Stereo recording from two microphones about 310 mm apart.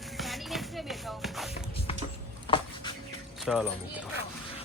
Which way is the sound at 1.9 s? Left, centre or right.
Centre.